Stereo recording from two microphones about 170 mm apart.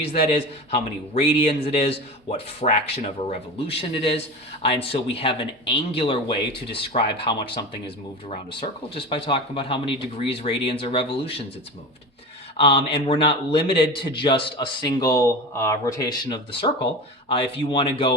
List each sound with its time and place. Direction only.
0.0 s a man's voice: 35° left (ahead or behind)
9.0 s a man's voice: 30° left (ahead or behind)
12.5 s a man's voice: 35° left (ahead or behind)